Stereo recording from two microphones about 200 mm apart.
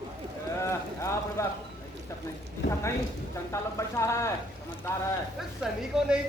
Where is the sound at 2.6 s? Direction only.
60° left (ahead or behind).